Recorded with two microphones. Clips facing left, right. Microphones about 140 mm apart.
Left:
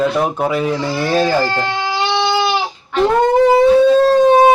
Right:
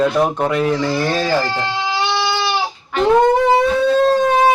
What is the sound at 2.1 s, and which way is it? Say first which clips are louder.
Goat: left 4 dB; 20° left (ahead or behind).